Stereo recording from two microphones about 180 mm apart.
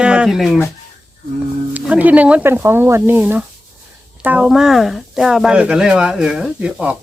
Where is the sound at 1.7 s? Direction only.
10° right (ahead or behind).